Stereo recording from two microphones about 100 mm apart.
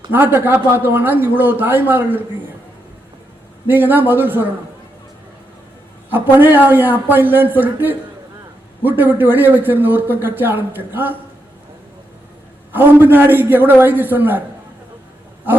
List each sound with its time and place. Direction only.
0.1 s a man's voice: 20° right (ahead or behind)
3.7 s a man's voice: 20° right (ahead or behind)
6.1 s a man's voice: 20° right (ahead or behind)
12.7 s a man's voice: 20° right (ahead or behind)